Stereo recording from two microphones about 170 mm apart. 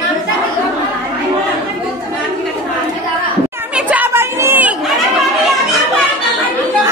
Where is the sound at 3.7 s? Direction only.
10° right (ahead or behind).